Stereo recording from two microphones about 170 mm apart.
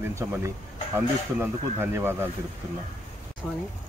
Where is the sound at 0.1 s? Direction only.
15° right (ahead or behind).